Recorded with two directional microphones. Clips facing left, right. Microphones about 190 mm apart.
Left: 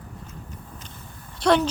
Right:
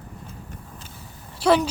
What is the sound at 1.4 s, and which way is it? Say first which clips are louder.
Speech: right 1 dB; 5° right (ahead or behind).